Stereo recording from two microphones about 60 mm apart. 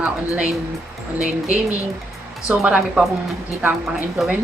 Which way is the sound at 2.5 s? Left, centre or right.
Centre.